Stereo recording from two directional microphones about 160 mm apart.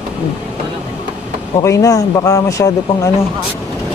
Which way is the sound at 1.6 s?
20° left (ahead or behind).